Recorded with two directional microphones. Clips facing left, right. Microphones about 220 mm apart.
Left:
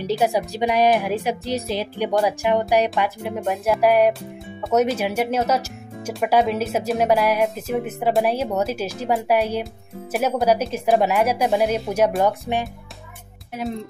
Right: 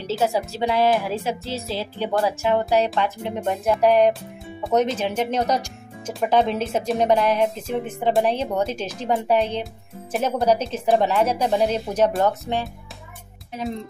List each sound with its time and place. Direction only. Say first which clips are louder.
0.0 s speech: left 2 dB; 15° left (ahead or behind)